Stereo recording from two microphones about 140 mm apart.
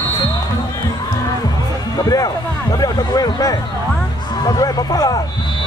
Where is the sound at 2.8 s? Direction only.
25° left (ahead or behind).